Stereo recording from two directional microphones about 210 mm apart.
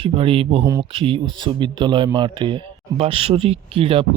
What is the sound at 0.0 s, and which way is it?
Speech, 25° right (ahead or behind).